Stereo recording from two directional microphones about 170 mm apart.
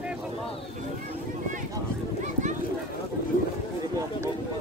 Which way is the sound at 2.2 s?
45° right (ahead or behind).